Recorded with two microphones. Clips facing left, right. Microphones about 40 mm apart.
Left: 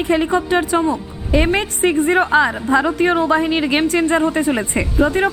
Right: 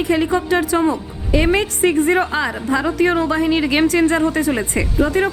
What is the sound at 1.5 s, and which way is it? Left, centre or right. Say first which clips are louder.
Speech: right 1 dB; left.